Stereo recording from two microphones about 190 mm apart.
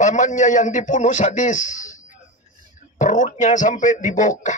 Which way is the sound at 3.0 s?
40° left (ahead or behind).